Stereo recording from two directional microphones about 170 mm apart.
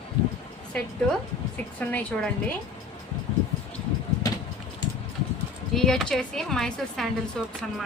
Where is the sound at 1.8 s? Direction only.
10° left (ahead or behind).